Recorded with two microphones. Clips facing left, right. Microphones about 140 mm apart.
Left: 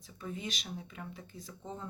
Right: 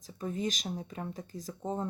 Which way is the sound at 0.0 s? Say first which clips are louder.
Right 7 dB; 40° right (ahead or behind).